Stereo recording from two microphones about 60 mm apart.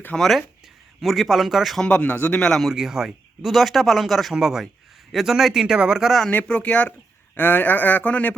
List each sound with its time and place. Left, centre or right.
0.2 s speech: centre
1.8 s speech: left
2.4 s speech: centre
2.6 s speech: centre
6.5 s speech: left